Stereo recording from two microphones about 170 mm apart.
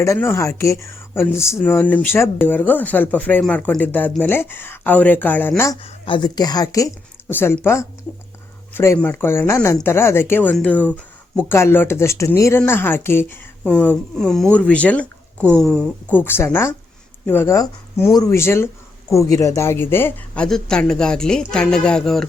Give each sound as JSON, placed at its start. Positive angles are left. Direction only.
{"t": 0.0, "sound": "speech", "side_deg": 15}
{"t": 5.8, "sound": "speech", "side_deg": 30}